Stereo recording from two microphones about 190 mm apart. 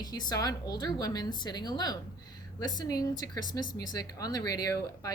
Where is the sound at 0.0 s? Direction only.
20° left (ahead or behind).